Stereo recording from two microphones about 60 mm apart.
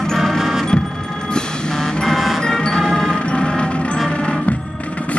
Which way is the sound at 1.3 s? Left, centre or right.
Centre.